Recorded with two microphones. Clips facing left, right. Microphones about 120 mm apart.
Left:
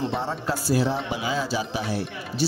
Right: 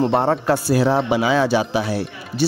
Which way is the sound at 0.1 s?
65° right (ahead or behind).